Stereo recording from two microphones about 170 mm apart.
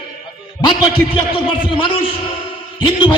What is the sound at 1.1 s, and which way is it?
A man's voice, 30° left (ahead or behind).